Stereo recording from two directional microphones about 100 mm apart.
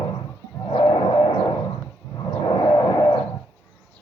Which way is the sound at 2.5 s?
40° left (ahead or behind).